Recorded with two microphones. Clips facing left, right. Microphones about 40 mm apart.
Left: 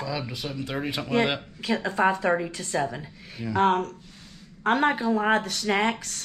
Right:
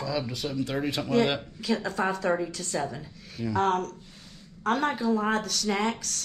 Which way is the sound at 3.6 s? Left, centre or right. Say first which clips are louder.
Left 4 dB; left.